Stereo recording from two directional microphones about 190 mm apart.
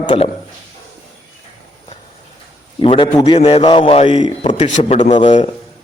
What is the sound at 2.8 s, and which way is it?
A man's voice, 25° left (ahead or behind).